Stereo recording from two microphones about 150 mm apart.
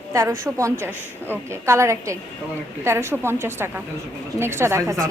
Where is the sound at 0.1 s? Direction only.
20° right (ahead or behind).